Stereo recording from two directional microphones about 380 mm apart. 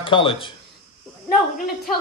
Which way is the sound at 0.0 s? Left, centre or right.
Centre.